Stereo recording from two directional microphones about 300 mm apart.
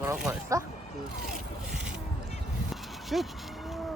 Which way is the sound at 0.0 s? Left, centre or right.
Centre.